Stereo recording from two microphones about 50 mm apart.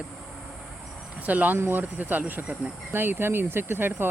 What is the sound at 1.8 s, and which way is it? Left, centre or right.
Speech, right.